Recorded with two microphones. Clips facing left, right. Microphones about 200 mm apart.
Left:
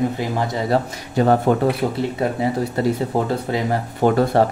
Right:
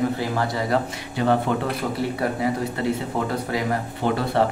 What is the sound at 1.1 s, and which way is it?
Speech, 45° left (ahead or behind).